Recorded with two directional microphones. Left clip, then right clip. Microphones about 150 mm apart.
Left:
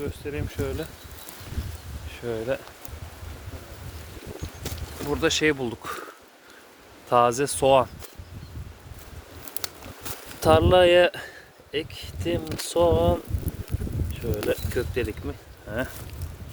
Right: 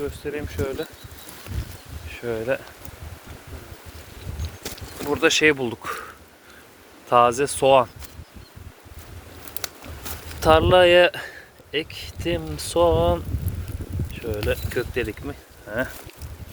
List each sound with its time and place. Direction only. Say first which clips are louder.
0.3 s speech: right 3 dB; 35° right (ahead or behind)
2.2 s speech: right 3 dB; 10° left (ahead or behind)
4.7 s boat: right 3 dB; 60° right (ahead or behind)
5.0 s speech: right 5 dB; centre (ahead or behind)
5.5 s speech: right 3 dB; 20° left (ahead or behind)
7.1 s speech: right 3 dB; 35° left (ahead or behind)
9.6 s a sound: right 2 dB; 55° right (ahead or behind)
10.4 s speech: right 2 dB; 25° left (ahead or behind)